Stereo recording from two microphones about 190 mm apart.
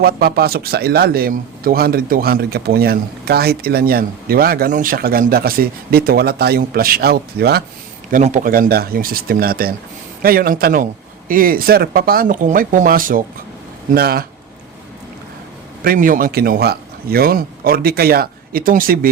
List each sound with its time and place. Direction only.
0.0 s speech: 55° right (ahead or behind)
8.1 s speech: 40° right (ahead or behind)
15.8 s speech: 50° right (ahead or behind)